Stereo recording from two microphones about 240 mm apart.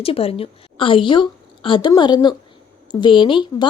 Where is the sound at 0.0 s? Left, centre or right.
Left.